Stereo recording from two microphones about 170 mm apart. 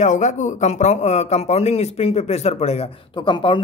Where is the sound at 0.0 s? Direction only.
45° left (ahead or behind).